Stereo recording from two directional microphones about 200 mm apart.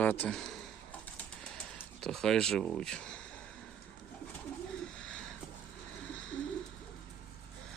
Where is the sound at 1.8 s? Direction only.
Centre (ahead or behind).